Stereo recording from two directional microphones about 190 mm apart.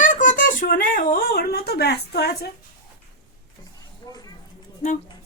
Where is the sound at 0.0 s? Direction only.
45° left (ahead or behind); by 2.3 s 60° left (ahead or behind).